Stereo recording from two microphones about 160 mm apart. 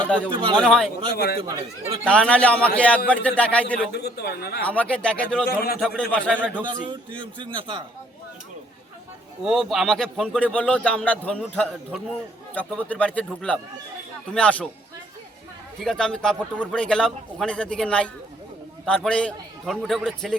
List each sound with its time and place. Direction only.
0.6 s a man's voice: 5° left (ahead or behind)
1.1 s speech: 75° left (ahead or behind)
2.0 s speech: 5° left (ahead or behind)
3.9 s a man's voice: 90° left
4.6 s speech: 10° left (ahead or behind)
5.5 s a man's voice: 90° left
5.8 s speech: 5° left (ahead or behind)
6.7 s a man's voice: 30° right (ahead or behind)
9.4 s a man's voice: centre (ahead or behind)
15.8 s a man's voice: 5° left (ahead or behind)